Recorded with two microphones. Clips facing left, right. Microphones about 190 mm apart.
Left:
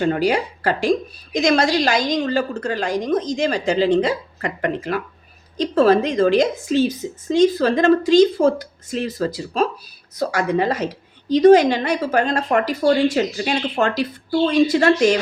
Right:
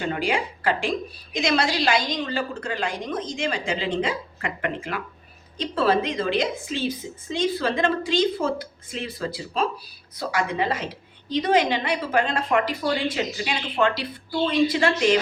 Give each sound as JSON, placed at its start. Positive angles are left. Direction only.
{"t": 0.0, "sound": "a woman's voice", "side_deg": 40}